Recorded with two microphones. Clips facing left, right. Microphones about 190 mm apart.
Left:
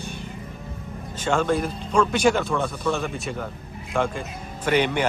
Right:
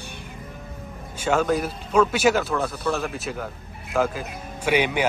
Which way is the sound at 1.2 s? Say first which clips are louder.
Right 1 dB; 5° right (ahead or behind).